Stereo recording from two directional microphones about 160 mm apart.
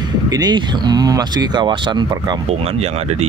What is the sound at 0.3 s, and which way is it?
Speech, 25° right (ahead or behind).